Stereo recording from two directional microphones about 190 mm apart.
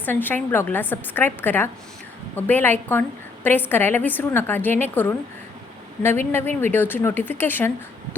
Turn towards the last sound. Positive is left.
turn(degrees=10)  # may be behind; listen again after turning